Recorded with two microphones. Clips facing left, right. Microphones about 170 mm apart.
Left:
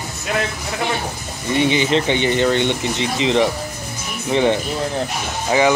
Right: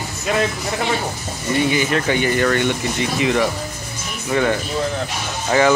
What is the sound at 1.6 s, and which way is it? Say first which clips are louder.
Speech: left 3 dB; 20° left (ahead or behind).